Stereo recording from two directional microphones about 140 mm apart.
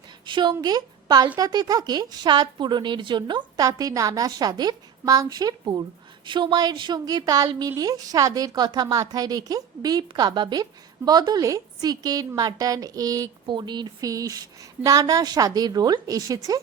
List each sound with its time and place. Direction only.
0.3 s a woman's voice: 35° right (ahead or behind)